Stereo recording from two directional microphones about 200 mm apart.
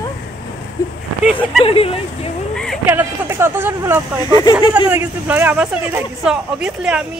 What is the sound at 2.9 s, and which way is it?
Speech, 10° right (ahead or behind).